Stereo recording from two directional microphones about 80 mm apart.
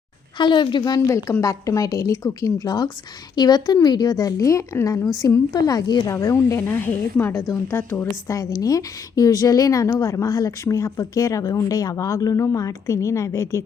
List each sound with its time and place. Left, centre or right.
0.3 s a woman's voice: left
1.0 s a woman's voice: left
2.6 s a woman's voice: left
5.5 s a woman's voice: left
6.1 s a woman's voice: left
6.6 s a woman's voice: left
8.3 s a woman's voice: left